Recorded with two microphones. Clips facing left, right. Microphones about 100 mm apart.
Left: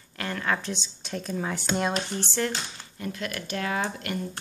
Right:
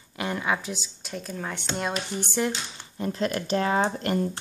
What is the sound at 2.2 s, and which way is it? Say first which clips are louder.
Speech: right 2 dB; 15° right (ahead or behind).